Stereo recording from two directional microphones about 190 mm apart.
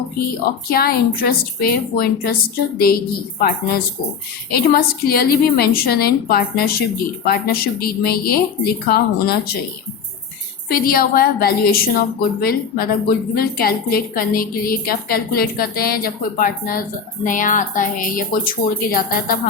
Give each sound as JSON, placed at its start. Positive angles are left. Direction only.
{"t": 0.7, "sound": "a woman's voice", "side_deg": 55}
{"t": 4.5, "sound": "a woman's voice", "side_deg": 50}
{"t": 10.7, "sound": "a woman's voice", "side_deg": 50}